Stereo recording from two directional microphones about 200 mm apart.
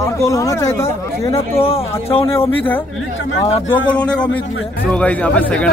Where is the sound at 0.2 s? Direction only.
15° left (ahead or behind).